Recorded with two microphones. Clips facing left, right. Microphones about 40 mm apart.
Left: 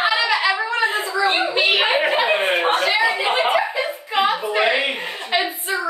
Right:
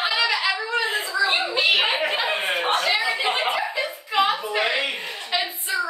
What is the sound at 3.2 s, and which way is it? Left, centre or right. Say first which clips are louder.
Chuckle: left 5 dB; left.